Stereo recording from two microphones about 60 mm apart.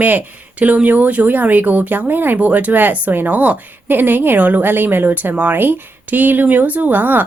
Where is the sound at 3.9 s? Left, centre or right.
Right.